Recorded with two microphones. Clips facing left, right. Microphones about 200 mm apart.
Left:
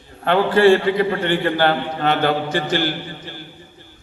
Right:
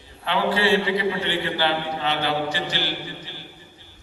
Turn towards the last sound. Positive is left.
turn(degrees=50)  # may be behind; listen again after turning